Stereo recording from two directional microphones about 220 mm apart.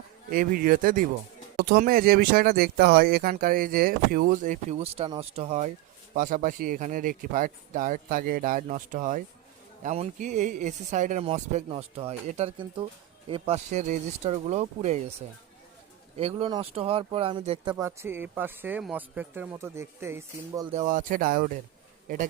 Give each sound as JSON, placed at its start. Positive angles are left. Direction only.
{"t": 0.3, "sound": "speech", "side_deg": -40}
{"t": 16.1, "sound": "speech", "side_deg": -25}
{"t": 17.7, "sound": "speech", "side_deg": -10}
{"t": 20.7, "sound": "speech", "side_deg": -35}